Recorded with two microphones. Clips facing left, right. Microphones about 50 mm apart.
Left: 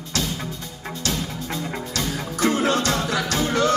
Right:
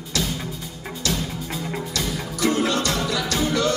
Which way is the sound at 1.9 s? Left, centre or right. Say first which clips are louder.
Left 1 dB; left.